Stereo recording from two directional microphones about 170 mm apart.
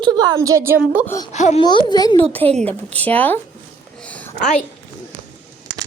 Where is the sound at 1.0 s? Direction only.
20° left (ahead or behind).